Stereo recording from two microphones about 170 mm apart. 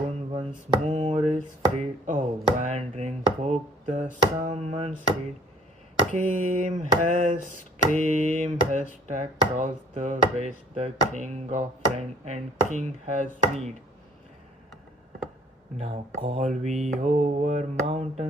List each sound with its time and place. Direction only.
0.1 s speech: 35° right (ahead or behind)
6.1 s a sound: 45° right (ahead or behind)
16.2 s speech: 40° right (ahead or behind)